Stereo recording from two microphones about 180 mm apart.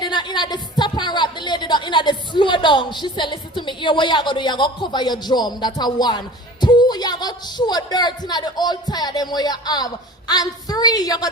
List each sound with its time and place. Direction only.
0.0 s a woman's voice: 25° left (ahead or behind)